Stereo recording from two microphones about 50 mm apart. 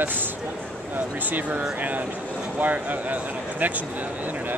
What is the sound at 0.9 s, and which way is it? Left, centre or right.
Speech, right.